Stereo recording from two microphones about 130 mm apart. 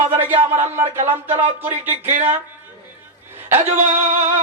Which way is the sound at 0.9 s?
50° right (ahead or behind).